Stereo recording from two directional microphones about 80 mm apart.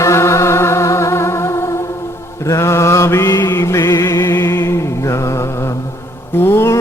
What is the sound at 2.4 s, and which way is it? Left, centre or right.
Mantra, left.